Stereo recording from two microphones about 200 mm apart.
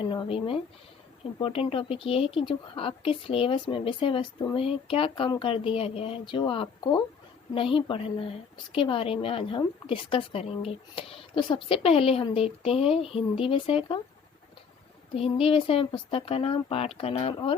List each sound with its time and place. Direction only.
0.0 s a woman's voice: 25° left (ahead or behind)
15.1 s a woman's voice: 30° left (ahead or behind)